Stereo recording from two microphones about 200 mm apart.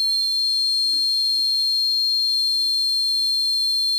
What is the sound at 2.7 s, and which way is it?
Whistle, 20° right (ahead or behind).